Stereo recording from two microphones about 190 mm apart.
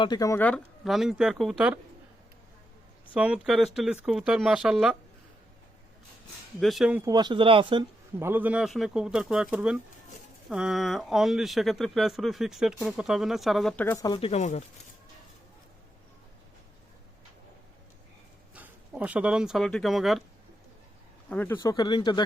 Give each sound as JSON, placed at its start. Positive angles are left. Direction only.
{"t": 0.0, "sound": "speech", "side_deg": 20}
{"t": 3.2, "sound": "speech", "side_deg": -5}
{"t": 6.6, "sound": "speech", "side_deg": 0}
{"t": 7.0, "sound": "speech", "side_deg": -20}
{"t": 8.2, "sound": "speech", "side_deg": -10}
{"t": 18.5, "sound": "speech", "side_deg": -10}
{"t": 21.2, "sound": "speech", "side_deg": 10}